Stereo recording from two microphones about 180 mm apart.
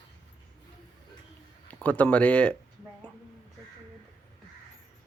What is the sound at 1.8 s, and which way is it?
Speech, 10° left (ahead or behind).